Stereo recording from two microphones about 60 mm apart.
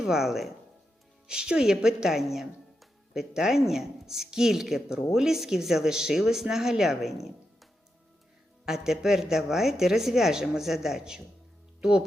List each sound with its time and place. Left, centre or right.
0.0 s speech: centre